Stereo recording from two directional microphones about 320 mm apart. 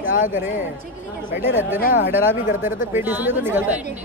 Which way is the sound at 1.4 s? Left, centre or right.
Centre.